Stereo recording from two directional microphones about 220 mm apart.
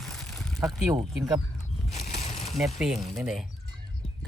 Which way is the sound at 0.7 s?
5° right (ahead or behind).